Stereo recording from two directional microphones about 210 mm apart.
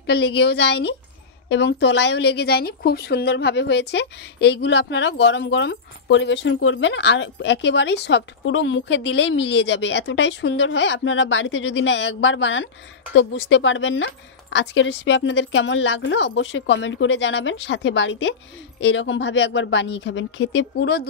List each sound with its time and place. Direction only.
0.0 s a woman's voice: 50° left (ahead or behind)